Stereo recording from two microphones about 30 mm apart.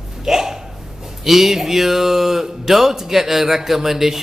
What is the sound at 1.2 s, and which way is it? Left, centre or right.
A man's voice, centre.